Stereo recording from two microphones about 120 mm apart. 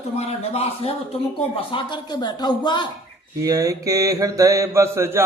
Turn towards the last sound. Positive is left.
turn(degrees=-25)  # may be behind; listen again after turning